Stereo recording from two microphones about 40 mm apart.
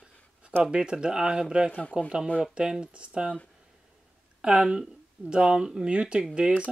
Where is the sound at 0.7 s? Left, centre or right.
Right.